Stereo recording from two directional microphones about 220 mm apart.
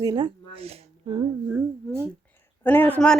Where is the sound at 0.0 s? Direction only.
20° right (ahead or behind).